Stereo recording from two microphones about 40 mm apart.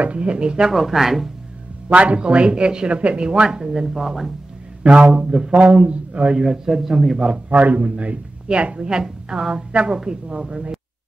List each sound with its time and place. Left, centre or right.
0.0 s a man's voice: right
0.7 s speech: centre
1.9 s a man's voice: right
3.3 s a woman's voice: centre
4.8 s a man's voice: right
6.4 s a woman's voice: centre
7.4 s a man's voice: right
8.7 s a woman's voice: centre